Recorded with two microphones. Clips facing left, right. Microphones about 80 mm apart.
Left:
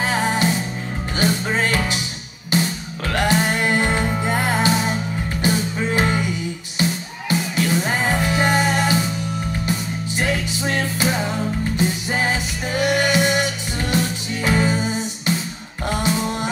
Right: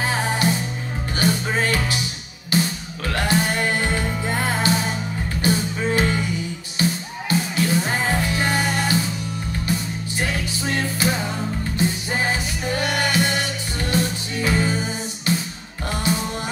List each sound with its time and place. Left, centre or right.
0.0 s music: left